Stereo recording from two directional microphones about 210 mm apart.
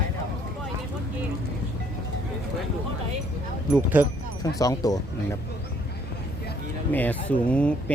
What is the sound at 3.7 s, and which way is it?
Speech, 10° right (ahead or behind).